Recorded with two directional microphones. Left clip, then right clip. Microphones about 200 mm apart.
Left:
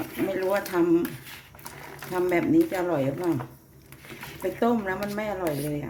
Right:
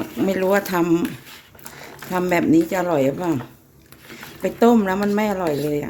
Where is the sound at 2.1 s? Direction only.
55° right (ahead or behind).